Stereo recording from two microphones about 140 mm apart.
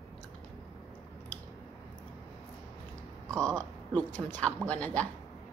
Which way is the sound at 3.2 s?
25° right (ahead or behind).